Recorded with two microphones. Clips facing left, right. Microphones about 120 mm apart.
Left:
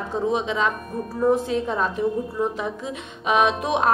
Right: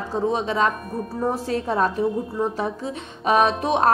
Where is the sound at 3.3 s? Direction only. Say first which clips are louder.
Right 1 dB; centre (ahead or behind).